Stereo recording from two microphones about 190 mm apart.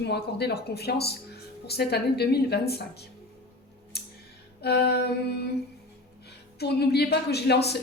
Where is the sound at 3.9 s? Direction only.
60° left (ahead or behind).